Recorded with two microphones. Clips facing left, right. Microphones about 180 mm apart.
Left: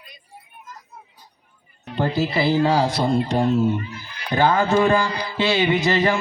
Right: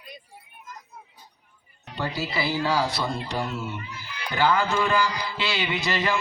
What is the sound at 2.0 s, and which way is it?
Speech, 50° left (ahead or behind).